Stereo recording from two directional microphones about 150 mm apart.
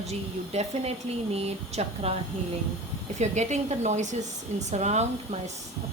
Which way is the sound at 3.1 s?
50° right (ahead or behind).